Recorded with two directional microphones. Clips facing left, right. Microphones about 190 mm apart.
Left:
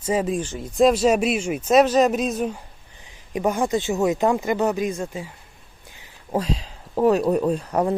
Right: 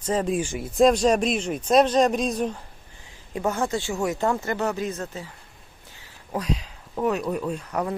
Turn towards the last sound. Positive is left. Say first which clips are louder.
# left 6 dB
turn(degrees=30)  # may be behind; listen again after turning